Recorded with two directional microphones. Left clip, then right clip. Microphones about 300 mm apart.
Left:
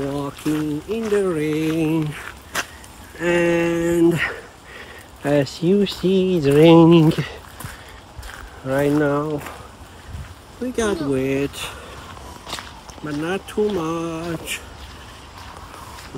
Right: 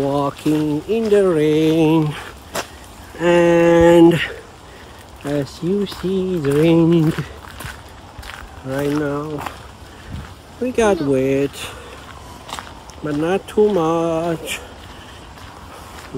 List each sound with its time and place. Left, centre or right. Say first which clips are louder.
0.1 s speech: right 6 dB; centre
3.2 s a sound: right 5 dB; centre
5.2 s speech: left 4 dB; left
8.6 s speech: left 2 dB; left
10.6 s speech: right 6 dB; centre
12.5 s speech: right 1 dB; centre